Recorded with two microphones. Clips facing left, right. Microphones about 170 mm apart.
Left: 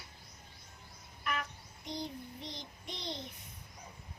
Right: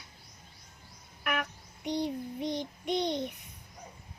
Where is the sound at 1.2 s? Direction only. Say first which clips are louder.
Right 5 dB; 70° right (ahead or behind).